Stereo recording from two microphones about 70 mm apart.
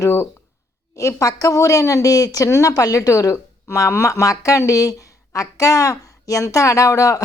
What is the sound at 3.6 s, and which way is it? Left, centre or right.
A woman's voice, left.